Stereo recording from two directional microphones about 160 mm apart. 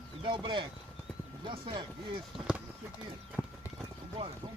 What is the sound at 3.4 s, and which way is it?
Clip-clop, 15° left (ahead or behind).